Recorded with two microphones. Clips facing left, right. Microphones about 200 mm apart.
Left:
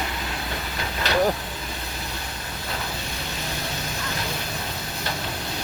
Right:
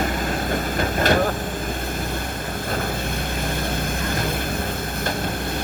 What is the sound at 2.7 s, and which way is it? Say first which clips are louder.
Vehicle: right 6 dB; 50° right (ahead or behind).